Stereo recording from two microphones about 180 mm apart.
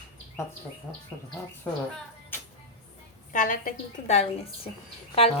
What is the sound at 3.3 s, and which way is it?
A woman's voice, 50° left (ahead or behind).